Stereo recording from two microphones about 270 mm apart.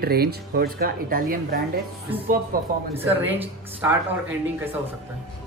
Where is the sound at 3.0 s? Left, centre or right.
Centre.